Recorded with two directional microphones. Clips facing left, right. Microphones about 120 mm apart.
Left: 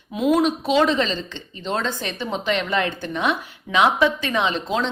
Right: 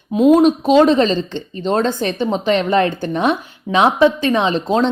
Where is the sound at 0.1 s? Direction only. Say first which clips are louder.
Right 8 dB; 30° right (ahead or behind).